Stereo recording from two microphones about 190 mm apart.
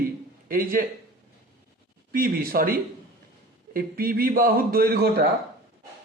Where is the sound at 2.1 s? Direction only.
50° right (ahead or behind).